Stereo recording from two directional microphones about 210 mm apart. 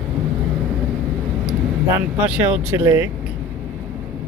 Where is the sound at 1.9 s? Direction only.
5° right (ahead or behind).